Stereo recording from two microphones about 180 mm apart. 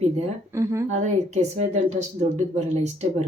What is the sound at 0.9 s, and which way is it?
Speech, 40° right (ahead or behind).